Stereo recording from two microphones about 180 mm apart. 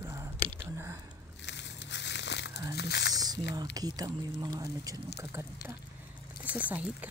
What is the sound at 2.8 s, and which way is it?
Speech, 65° left (ahead or behind).